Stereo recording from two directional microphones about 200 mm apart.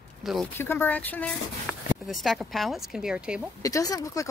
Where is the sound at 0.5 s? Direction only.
10° left (ahead or behind).